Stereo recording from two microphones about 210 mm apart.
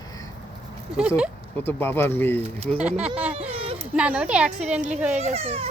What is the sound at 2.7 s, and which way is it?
A child's voice, 5° right (ahead or behind).